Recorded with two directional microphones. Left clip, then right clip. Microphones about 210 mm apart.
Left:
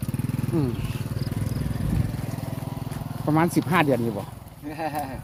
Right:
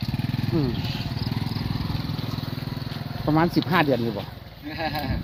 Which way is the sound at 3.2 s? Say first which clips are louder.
Right 1 dB; centre (ahead or behind).